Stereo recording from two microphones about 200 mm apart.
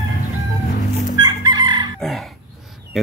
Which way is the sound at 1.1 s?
20° right (ahead or behind).